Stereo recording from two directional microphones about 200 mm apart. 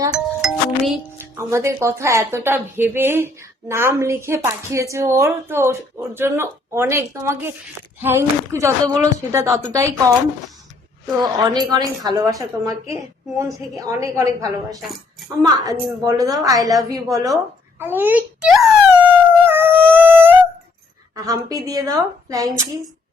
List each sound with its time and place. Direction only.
0.1 s music: centre (ahead or behind)
1.4 s a woman's voice: 15° right (ahead or behind)
19.5 s dog: 10° right (ahead or behind)
21.2 s a woman's voice: 15° right (ahead or behind)